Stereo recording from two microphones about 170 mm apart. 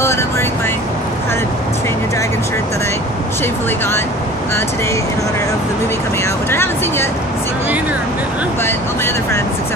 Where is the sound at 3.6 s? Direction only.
15° left (ahead or behind).